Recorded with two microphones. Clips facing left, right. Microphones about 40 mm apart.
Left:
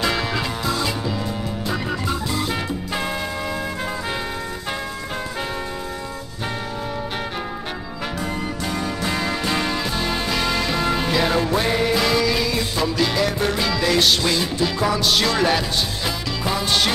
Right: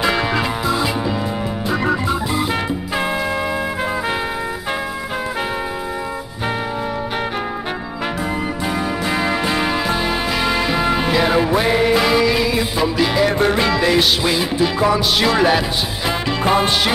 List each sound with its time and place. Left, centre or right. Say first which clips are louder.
0.0 s music: right 4 dB; centre
8.7 s music: right 3 dB; centre
16.4 s music: right 8 dB; right